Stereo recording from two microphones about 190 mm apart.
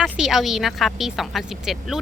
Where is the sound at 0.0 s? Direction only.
Centre (ahead or behind).